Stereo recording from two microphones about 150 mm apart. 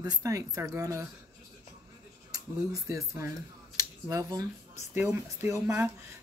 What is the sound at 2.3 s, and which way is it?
Speech, 20° right (ahead or behind).